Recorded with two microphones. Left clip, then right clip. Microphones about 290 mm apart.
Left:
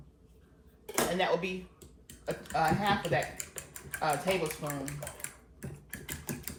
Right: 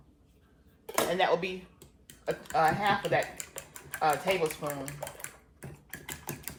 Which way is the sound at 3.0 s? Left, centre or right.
Centre.